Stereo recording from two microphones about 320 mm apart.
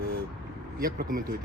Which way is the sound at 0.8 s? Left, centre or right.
Right.